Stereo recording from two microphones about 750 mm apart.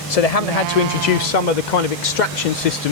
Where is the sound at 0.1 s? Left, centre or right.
Left.